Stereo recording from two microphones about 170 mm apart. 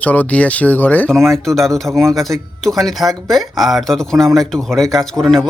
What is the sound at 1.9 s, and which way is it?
Speech, 20° right (ahead or behind).